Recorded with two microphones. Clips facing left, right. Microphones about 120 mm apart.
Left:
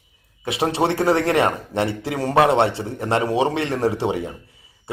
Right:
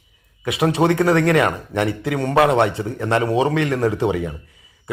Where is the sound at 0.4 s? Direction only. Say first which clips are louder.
Right 3 dB; 30° left (ahead or behind).